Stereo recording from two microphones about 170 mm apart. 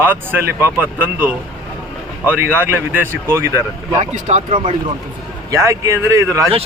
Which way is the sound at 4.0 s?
40° right (ahead or behind).